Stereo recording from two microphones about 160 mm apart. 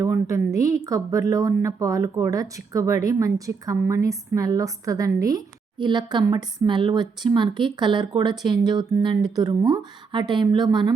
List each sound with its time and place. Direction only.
0.0 s a woman's voice: 20° right (ahead or behind)